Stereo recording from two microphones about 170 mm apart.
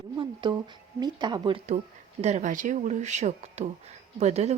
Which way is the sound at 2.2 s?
45° right (ahead or behind).